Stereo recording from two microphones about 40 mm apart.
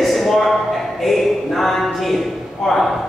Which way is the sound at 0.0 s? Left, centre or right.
Centre.